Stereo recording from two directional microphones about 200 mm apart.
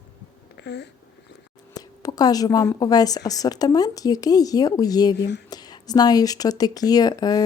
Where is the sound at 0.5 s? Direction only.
55° left (ahead or behind).